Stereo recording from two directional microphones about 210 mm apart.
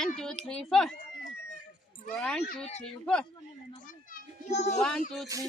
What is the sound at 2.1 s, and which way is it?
A woman's voice, centre (ahead or behind).